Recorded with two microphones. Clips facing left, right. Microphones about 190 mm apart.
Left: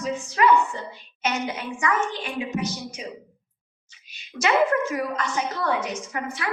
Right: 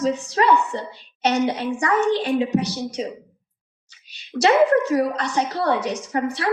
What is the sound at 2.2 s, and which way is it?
Speech, 35° right (ahead or behind).